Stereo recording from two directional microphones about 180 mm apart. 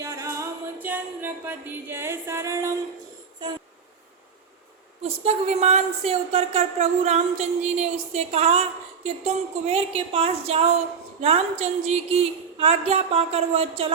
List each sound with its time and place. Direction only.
0.0 s music: 15° right (ahead or behind)
3.4 s a sound: 25° right (ahead or behind)
5.2 s speech: 35° right (ahead or behind)